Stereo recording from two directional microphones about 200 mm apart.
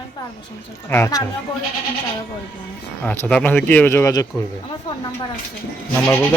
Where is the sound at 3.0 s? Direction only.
10° left (ahead or behind).